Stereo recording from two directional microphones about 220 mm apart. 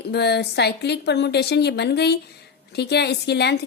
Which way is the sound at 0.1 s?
50° left (ahead or behind).